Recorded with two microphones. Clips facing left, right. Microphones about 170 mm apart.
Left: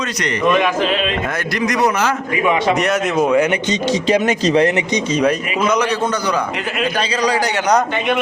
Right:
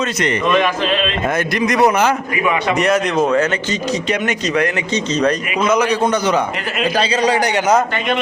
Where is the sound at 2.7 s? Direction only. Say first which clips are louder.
Right 1 dB; centre (ahead or behind); by 4.0 s 20° left (ahead or behind).